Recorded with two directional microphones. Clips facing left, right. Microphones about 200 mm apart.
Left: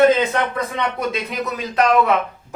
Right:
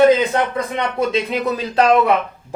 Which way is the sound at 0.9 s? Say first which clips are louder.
Right 5 dB; 30° right (ahead or behind).